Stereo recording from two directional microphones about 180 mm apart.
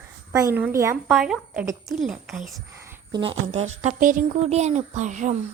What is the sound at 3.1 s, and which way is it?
Speech, 30° right (ahead or behind).